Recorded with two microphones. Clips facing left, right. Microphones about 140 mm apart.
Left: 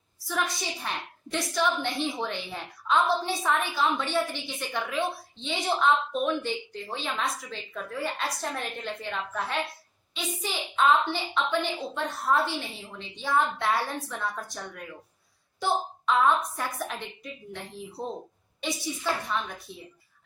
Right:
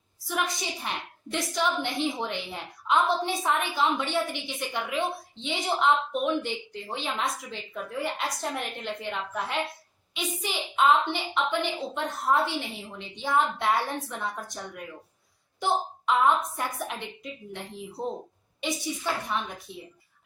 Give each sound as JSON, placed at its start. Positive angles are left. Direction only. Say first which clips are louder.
{"t": 0.3, "sound": "a woman's voice", "louder": "even", "side_deg": -15}
{"t": 19.3, "sound": "a woman's voice", "louder": "even", "side_deg": -15}